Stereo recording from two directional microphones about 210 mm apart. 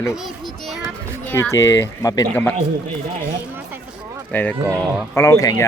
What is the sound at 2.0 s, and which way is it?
Speech, 15° left (ahead or behind).